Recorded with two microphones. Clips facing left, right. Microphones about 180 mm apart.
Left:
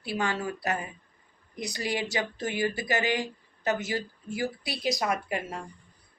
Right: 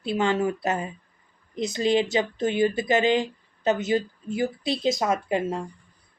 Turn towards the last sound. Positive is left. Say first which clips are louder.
# right 7 dB
turn(degrees=-25)  # may be behind; listen again after turning